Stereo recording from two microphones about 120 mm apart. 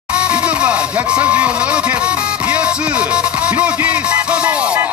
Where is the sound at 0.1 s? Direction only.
10° right (ahead or behind).